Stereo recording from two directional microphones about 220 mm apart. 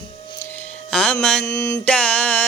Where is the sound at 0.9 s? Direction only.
Centre (ahead or behind).